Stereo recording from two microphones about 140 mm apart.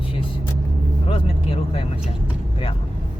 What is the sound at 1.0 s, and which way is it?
Vehicle, 40° left (ahead or behind).